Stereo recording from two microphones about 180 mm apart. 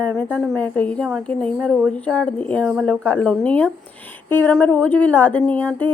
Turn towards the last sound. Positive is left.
turn(degrees=10)  # may be behind; listen again after turning